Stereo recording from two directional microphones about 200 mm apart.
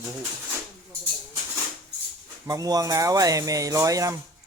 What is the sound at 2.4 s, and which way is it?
Speech, 20° right (ahead or behind).